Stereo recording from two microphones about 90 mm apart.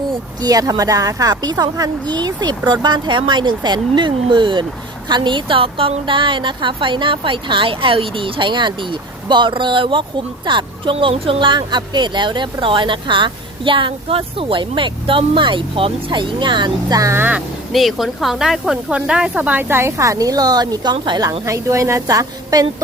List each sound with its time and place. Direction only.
0.4 s a woman's voice: 45° right (ahead or behind)
17.1 s speech: 20° right (ahead or behind)
17.7 s speech: centre (ahead or behind)
19.4 s a woman's voice: 20° right (ahead or behind); by 21.2 s 55° right (ahead or behind)
21.2 s a woman's voice: 35° right (ahead or behind)